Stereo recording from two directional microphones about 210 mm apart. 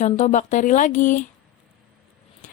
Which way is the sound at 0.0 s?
35° left (ahead or behind).